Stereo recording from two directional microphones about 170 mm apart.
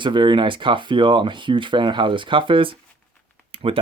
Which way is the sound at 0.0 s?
30° right (ahead or behind).